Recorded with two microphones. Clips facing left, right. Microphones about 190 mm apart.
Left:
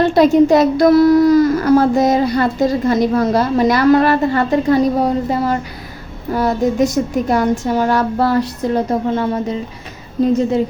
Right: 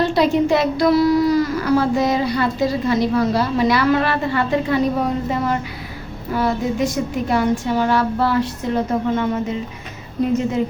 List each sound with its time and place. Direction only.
0.0 s speech: 50° left (ahead or behind)